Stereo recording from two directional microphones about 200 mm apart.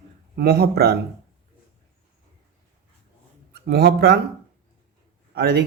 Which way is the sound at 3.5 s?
55° right (ahead or behind).